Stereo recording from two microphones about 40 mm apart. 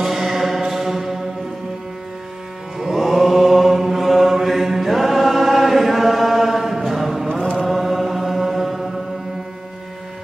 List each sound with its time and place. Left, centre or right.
0.0 s music: centre
2.8 s mantra: centre
7.5 s chant: centre